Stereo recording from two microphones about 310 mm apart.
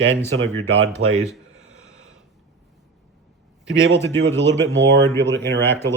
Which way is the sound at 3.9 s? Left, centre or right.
Centre.